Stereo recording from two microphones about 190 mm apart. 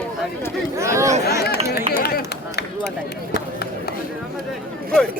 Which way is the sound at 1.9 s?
55° left (ahead or behind).